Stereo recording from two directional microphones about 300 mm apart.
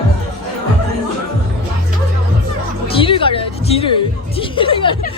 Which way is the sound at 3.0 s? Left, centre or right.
Centre.